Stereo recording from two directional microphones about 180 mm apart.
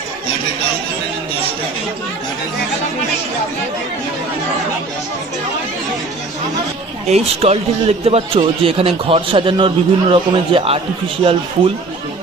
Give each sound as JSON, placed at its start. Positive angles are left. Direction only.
{"t": 7.1, "sound": "a man's voice", "side_deg": -35}